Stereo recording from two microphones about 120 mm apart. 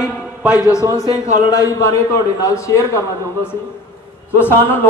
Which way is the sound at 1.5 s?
30° left (ahead or behind).